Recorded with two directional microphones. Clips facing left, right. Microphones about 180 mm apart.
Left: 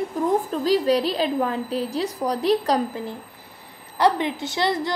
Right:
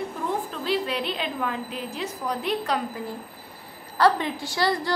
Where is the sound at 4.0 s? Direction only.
20° left (ahead or behind).